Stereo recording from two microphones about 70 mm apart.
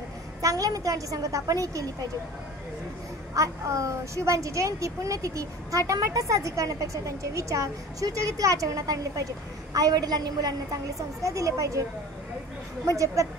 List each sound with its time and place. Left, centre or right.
0.4 s a woman's voice: right
3.3 s speech: right
9.8 s a woman's voice: right
12.8 s speech: right